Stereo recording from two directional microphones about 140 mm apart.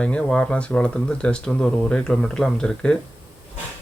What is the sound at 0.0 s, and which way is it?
Speech, 5° left (ahead or behind).